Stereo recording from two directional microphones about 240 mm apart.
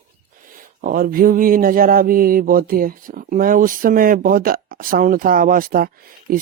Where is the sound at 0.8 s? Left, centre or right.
Right.